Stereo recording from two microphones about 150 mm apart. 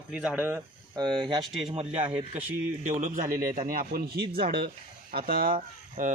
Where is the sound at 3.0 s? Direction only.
60° right (ahead or behind).